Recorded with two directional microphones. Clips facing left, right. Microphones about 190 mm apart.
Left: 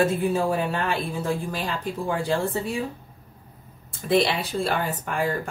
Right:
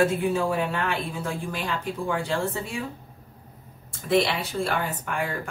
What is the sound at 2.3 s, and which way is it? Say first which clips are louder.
Speech: left 3 dB; 35° left (ahead or behind).